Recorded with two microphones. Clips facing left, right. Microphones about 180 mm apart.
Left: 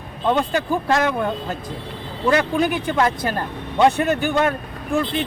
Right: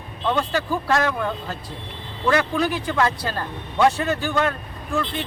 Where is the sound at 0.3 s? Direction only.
15° left (ahead or behind).